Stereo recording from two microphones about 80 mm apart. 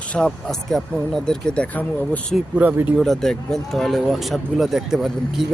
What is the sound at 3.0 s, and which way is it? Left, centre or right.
Speech, centre.